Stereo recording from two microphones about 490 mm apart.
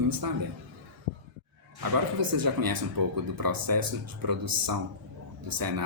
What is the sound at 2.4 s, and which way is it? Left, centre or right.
Speech, right.